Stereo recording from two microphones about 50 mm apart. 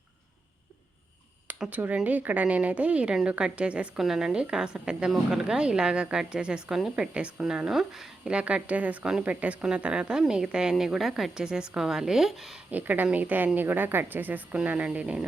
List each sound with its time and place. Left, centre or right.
1.7 s a woman's voice: right
3.9 s a woman's voice: centre
6.7 s a woman's voice: centre
7.1 s a woman's voice: right
7.4 s a woman's voice: centre
8.3 s a woman's voice: right; by 11.4 s centre
11.4 s a woman's voice: centre
12.7 s speech: right
14.5 s a woman's voice: right